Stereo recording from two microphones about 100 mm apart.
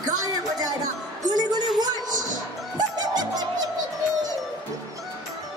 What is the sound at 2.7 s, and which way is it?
Music, 40° right (ahead or behind).